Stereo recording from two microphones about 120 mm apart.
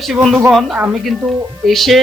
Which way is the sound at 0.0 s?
Centre (ahead or behind).